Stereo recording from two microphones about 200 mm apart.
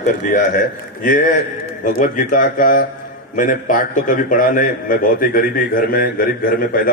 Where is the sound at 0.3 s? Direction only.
40° left (ahead or behind).